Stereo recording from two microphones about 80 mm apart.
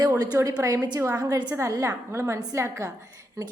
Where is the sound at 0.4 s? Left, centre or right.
Right.